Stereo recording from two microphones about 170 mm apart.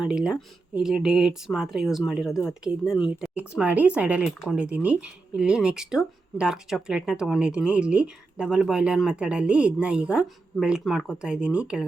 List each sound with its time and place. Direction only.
0.0 s speech: 5° right (ahead or behind)